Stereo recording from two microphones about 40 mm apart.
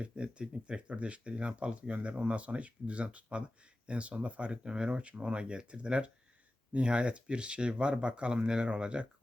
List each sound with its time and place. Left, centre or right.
0.0 s speech: right
4.6 s speech: centre